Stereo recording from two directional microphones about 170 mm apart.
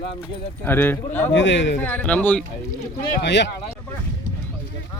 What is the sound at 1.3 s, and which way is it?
Speech, 90° left.